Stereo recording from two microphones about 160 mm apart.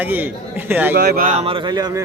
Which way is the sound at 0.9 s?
70° right (ahead or behind).